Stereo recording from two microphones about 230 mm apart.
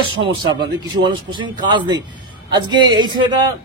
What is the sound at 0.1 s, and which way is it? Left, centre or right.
A man's voice, right.